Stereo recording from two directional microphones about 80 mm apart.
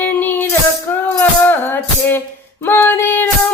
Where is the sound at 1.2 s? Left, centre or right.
Left.